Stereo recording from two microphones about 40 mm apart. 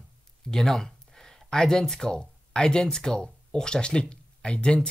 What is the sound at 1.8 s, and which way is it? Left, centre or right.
Speech, centre.